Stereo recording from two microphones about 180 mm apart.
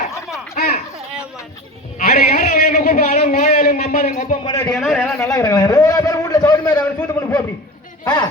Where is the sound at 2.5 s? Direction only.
55° left (ahead or behind).